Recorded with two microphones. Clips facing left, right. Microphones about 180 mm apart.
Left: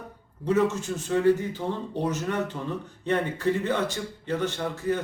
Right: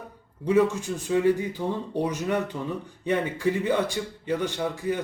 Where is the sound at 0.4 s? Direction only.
10° right (ahead or behind).